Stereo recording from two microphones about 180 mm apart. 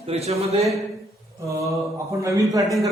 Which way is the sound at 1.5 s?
15° right (ahead or behind).